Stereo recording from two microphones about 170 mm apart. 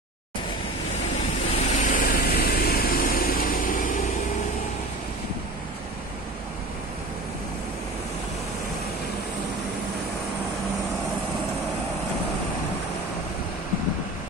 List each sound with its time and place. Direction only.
1.1 s vehicle: 40° left (ahead or behind)